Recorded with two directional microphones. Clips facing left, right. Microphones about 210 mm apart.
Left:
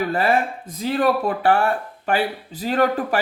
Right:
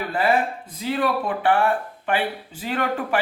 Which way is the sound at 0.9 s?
40° left (ahead or behind).